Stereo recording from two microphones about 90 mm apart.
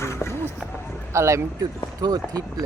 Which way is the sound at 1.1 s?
30° right (ahead or behind).